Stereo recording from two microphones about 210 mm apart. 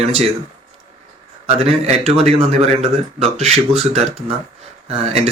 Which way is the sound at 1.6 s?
30° right (ahead or behind).